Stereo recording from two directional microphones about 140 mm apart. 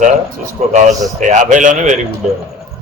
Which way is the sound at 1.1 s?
60° right (ahead or behind).